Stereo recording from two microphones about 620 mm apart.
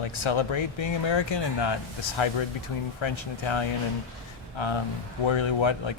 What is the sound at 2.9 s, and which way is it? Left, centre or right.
Speech, left.